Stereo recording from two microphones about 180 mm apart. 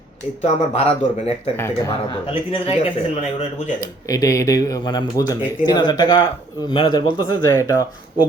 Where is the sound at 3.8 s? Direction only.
20° left (ahead or behind).